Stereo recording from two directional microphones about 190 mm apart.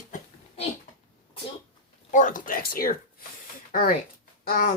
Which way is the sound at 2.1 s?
40° left (ahead or behind).